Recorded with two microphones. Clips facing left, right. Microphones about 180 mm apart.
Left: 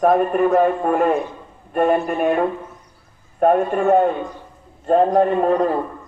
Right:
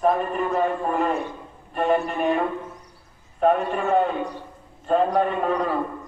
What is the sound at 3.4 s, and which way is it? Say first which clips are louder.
A man's voice: left 5 dB; 50° left (ahead or behind).